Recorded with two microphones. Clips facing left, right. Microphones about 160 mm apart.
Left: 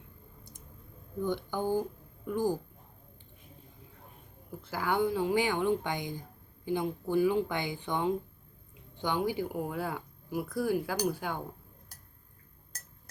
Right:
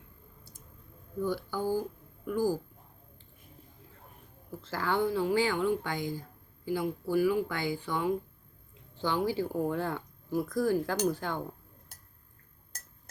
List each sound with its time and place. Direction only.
1.2 s speech: 20° left (ahead or behind)
4.6 s speech: 15° left (ahead or behind)